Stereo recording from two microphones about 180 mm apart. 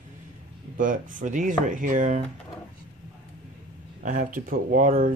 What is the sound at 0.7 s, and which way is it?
Speech, 45° right (ahead or behind).